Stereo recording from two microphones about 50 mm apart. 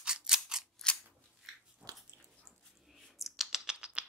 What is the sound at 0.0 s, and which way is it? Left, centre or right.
Scissors, centre.